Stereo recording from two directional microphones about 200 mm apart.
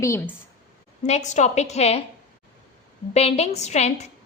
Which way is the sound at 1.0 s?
35° left (ahead or behind).